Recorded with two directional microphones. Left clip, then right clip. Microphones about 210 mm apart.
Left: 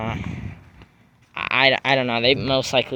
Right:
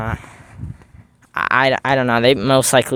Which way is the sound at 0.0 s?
20° right (ahead or behind).